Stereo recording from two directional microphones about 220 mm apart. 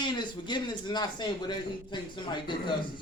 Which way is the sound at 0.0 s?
20° left (ahead or behind).